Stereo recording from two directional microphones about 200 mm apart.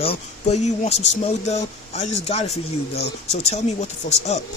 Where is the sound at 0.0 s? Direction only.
35° left (ahead or behind).